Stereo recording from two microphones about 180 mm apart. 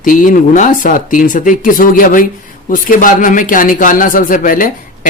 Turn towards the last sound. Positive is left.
turn(degrees=50)  # may be behind; listen again after turning